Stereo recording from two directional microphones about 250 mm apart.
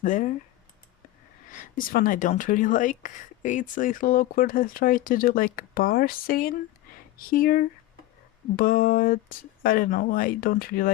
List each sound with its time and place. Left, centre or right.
0.0 s speech: left
1.5 s speech: left